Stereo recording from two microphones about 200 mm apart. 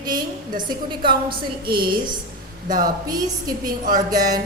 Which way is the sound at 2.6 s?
45° right (ahead or behind).